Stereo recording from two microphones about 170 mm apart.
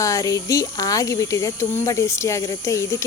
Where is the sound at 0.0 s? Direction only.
20° left (ahead or behind).